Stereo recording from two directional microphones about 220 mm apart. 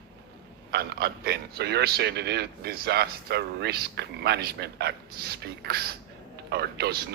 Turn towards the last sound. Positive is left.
turn(degrees=-50)  # may be behind; listen again after turning